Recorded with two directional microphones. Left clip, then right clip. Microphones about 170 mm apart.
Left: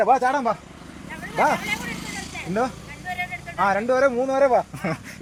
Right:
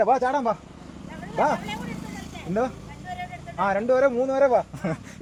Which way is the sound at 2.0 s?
60° right (ahead or behind).